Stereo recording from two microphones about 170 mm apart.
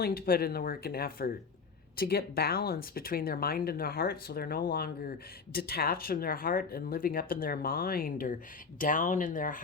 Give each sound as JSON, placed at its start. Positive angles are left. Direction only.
{"t": 0.0, "sound": "speech", "side_deg": 60}